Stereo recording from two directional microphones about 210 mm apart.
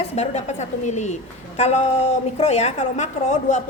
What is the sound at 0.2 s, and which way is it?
A woman's voice, 30° left (ahead or behind).